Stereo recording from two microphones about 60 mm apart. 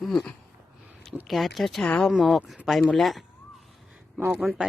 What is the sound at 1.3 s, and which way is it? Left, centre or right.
Speech, centre.